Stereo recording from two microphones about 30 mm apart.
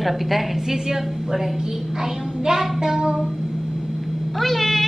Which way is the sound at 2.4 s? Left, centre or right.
Centre.